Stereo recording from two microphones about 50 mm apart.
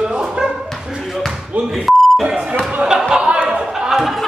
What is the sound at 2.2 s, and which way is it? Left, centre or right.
Speech, centre.